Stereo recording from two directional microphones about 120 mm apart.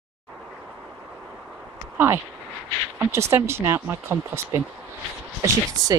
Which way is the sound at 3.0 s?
20° right (ahead or behind).